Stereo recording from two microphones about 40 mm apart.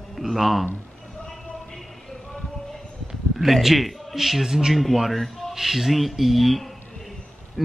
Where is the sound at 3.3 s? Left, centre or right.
Centre.